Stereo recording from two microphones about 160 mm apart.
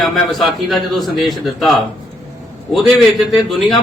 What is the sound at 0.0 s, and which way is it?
A man's voice, centre (ahead or behind).